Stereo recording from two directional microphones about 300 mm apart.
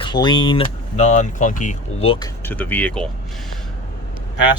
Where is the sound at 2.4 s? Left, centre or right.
Centre.